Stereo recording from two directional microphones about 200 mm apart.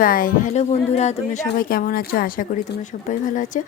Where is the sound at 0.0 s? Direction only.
45° left (ahead or behind).